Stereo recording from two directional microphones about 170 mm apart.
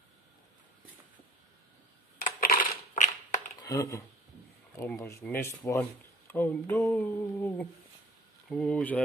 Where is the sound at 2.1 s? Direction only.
55° left (ahead or behind).